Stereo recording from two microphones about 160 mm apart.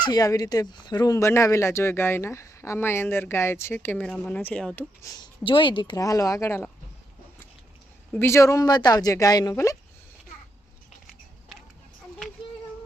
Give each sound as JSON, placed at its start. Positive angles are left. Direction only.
{"t": 0.0, "sound": "speech", "side_deg": 25}
{"t": 5.1, "sound": "speech", "side_deg": 30}
{"t": 8.1, "sound": "speech", "side_deg": 15}